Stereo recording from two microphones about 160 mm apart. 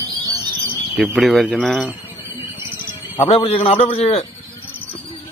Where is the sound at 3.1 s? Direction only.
35° left (ahead or behind).